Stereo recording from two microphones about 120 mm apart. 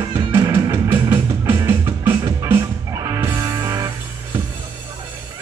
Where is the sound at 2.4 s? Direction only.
30° right (ahead or behind).